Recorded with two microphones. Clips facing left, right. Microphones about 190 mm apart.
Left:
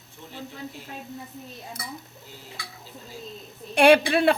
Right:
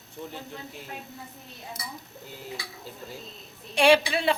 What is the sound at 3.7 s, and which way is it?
Speech, 55° left (ahead or behind).